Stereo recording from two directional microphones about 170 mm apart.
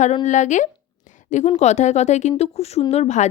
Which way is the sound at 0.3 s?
45° left (ahead or behind).